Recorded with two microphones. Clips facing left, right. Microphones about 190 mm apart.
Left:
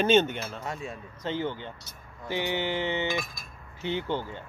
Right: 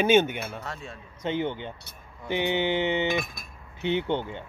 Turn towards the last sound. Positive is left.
turn(degrees=-20)  # may be behind; listen again after turning